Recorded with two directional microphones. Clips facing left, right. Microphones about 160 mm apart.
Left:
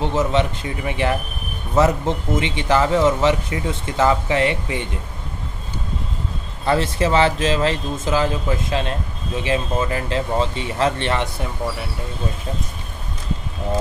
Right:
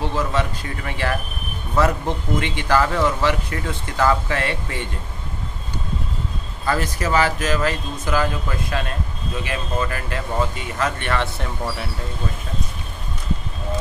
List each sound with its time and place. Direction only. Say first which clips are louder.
0.0 s speech: left 4 dB; 20° left (ahead or behind)
6.6 s speech: left 4 dB; 25° left (ahead or behind)